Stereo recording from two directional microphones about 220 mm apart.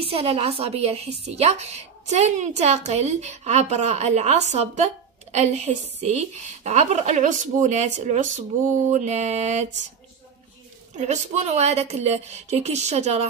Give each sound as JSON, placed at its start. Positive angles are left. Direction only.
{"t": 0.0, "sound": "a woman's voice", "side_deg": -25}
{"t": 11.0, "sound": "a woman's voice", "side_deg": -30}